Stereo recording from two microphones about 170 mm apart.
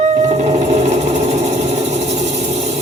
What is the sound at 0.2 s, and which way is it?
Sewing machine, 40° right (ahead or behind).